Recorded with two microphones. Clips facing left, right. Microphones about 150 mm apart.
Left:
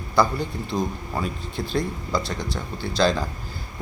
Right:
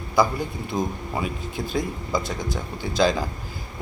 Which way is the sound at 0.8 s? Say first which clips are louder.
Right 1 dB; 10° right (ahead or behind).